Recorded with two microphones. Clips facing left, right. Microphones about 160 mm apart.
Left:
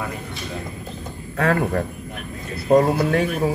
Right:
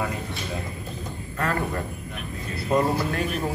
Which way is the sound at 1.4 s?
70° left (ahead or behind).